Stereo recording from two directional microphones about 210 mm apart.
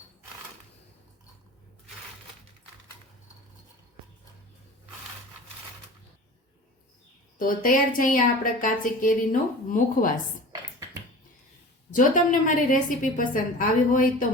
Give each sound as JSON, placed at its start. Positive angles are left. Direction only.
{"t": 7.3, "sound": "a woman's voice", "side_deg": 40}
{"t": 11.9, "sound": "a woman's voice", "side_deg": 40}